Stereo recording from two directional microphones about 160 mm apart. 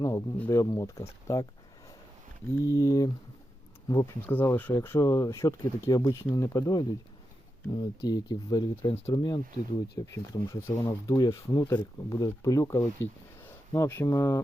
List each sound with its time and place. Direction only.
0.0 s speech: 15° left (ahead or behind)
2.6 s speech: 20° left (ahead or behind)